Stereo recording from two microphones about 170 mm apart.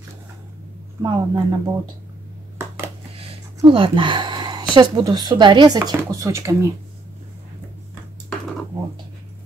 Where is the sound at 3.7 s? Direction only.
30° right (ahead or behind).